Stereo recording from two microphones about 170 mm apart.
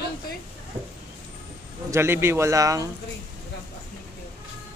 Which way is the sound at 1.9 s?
15° right (ahead or behind).